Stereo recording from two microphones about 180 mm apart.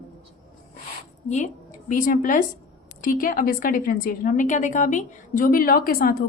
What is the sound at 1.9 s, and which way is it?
A woman's voice, 50° left (ahead or behind).